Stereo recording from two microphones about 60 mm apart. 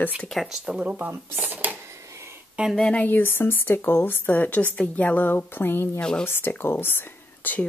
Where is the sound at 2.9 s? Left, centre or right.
Left.